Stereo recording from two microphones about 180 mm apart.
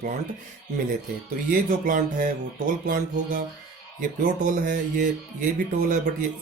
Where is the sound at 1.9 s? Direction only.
45° right (ahead or behind).